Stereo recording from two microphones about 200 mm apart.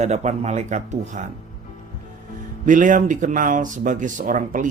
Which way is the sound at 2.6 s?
40° right (ahead or behind).